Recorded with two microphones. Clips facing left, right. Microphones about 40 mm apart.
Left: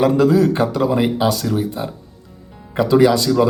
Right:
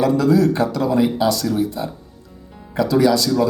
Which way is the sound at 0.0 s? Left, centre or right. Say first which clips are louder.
Left 2 dB; left.